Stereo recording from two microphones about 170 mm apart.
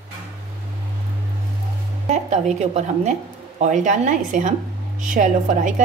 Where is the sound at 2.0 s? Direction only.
40° right (ahead or behind).